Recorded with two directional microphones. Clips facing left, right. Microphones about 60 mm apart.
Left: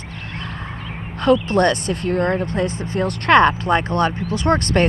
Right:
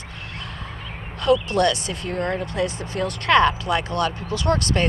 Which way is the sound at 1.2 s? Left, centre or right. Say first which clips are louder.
Left 3 dB; left.